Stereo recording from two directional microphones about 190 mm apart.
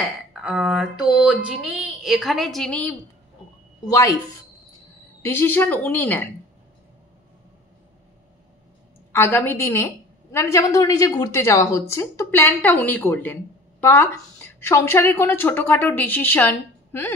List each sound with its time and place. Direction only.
0.3 s speech: 5° right (ahead or behind)
3.8 s speech: 15° left (ahead or behind)
5.2 s speech: 10° left (ahead or behind)
9.1 s speech: 10° left (ahead or behind)